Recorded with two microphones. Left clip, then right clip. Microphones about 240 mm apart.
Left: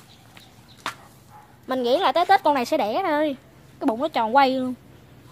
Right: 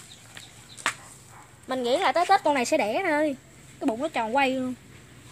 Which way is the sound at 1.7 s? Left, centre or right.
Left.